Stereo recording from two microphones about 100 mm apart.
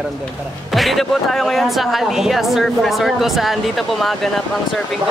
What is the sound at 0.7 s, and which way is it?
Speech, centre (ahead or behind).